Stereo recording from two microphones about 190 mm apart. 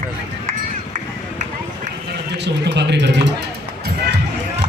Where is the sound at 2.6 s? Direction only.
65° right (ahead or behind).